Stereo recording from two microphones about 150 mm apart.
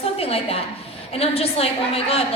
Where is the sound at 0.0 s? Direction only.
40° left (ahead or behind).